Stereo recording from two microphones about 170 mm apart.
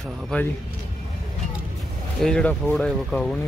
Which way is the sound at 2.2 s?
5° left (ahead or behind).